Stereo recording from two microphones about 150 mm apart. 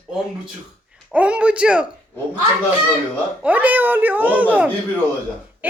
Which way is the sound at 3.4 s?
10° right (ahead or behind).